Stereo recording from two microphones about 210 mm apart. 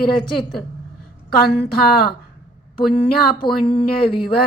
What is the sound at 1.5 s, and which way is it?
Speech, 50° left (ahead or behind).